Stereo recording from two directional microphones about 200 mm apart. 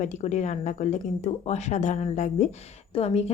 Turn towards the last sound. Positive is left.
turn(degrees=30)  # may be behind; listen again after turning